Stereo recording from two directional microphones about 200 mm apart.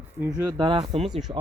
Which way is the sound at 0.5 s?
25° right (ahead or behind).